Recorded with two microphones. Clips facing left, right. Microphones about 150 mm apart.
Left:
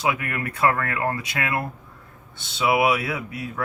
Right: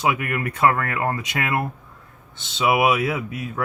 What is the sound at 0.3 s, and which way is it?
Speech, 25° right (ahead or behind).